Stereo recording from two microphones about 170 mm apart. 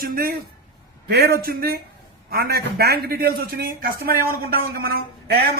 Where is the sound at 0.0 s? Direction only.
60° right (ahead or behind).